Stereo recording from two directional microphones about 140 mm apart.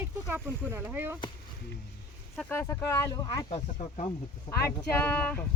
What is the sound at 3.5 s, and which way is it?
Speech, 45° left (ahead or behind).